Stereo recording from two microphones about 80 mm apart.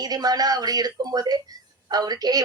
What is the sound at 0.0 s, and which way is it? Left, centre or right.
Speech, right.